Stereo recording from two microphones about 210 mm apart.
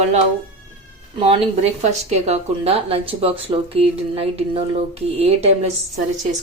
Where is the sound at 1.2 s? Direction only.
30° right (ahead or behind).